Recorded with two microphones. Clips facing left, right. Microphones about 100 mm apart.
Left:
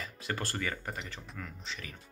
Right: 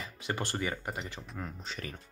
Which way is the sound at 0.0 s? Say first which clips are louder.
Right 1 dB; 20° right (ahead or behind).